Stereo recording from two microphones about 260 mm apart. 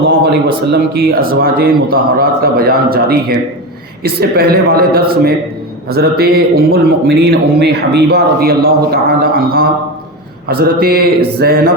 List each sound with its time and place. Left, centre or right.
0.0 s a man's voice: right